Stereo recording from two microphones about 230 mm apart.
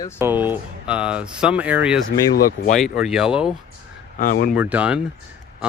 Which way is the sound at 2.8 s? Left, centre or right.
Centre.